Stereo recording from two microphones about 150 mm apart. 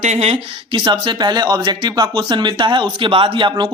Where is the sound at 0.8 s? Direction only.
30° right (ahead or behind).